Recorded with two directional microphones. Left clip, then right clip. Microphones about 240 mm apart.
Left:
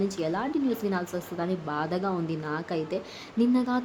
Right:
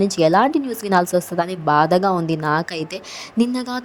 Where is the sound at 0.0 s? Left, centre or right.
Right.